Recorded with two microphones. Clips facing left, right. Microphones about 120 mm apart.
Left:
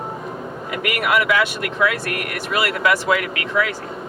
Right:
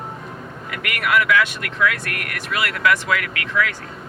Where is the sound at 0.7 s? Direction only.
25° left (ahead or behind).